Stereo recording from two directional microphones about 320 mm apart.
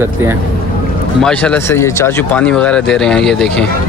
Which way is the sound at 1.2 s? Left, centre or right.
Centre.